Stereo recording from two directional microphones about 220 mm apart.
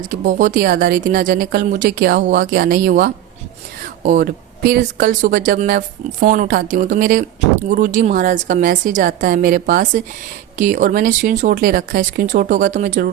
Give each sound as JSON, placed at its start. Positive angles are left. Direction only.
{"t": 0.3, "sound": "speech", "side_deg": -35}